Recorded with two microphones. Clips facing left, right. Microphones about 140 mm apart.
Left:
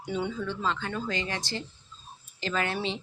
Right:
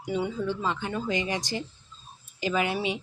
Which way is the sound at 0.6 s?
15° right (ahead or behind).